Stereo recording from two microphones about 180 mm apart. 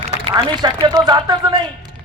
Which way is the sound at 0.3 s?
25° right (ahead or behind).